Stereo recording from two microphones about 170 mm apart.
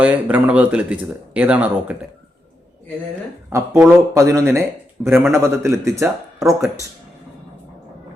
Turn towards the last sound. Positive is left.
turn(degrees=-15)  # may be behind; listen again after turning